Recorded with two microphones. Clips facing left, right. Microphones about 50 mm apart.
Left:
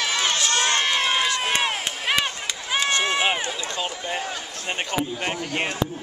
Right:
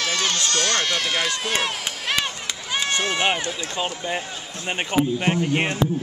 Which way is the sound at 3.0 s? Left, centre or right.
Centre.